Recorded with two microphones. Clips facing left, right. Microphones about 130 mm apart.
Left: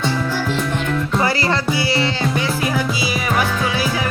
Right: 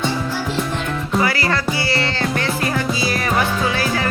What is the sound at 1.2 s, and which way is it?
Music, 25° left (ahead or behind).